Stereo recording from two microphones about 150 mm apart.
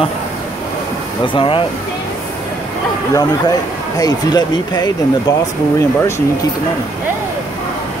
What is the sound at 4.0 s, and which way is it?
Speech, 25° left (ahead or behind).